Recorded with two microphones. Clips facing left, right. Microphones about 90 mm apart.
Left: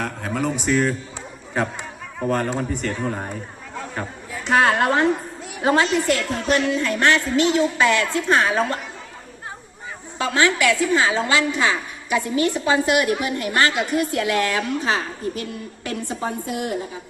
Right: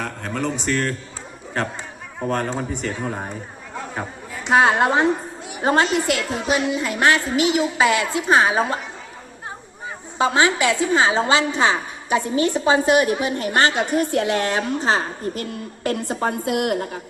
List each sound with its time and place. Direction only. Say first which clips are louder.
0.0 s speech: left 1 dB; 5° left (ahead or behind)
2.2 s a man's voice: left 1 dB; centre (ahead or behind)
4.4 s a woman's voice: right 1 dB; 15° right (ahead or behind)
5.6 s a woman's voice: even; 40° right (ahead or behind)
5.9 s a woman's voice: left 1 dB; 10° right (ahead or behind)
10.2 s a woman's voice: right 2 dB; 20° right (ahead or behind); by 16.0 s 50° right (ahead or behind)
16.2 s a woman's voice: right 6 dB; 70° right (ahead or behind)